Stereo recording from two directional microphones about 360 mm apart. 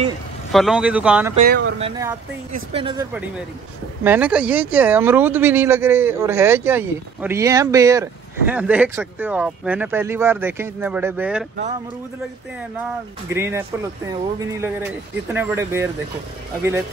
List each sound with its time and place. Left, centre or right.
0.5 s speech: centre
1.3 s speech: right
1.8 s speech: centre
13.3 s speech: centre